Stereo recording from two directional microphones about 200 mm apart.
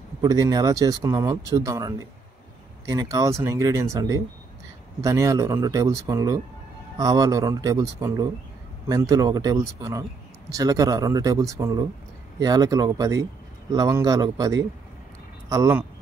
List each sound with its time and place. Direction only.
0.2 s a man's voice: 20° right (ahead or behind)